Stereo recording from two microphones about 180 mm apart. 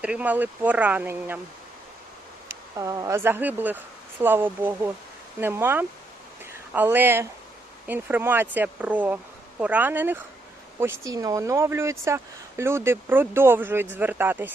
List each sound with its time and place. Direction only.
0.0 s speech: 5° right (ahead or behind)
2.7 s speech: 20° right (ahead or behind)